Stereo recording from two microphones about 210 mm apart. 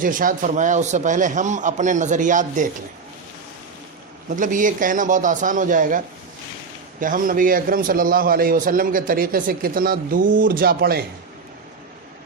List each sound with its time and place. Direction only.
0.0 s a man's voice: 40° right (ahead or behind)
4.4 s a man's voice: 40° right (ahead or behind)
7.0 s a man's voice: 40° right (ahead or behind)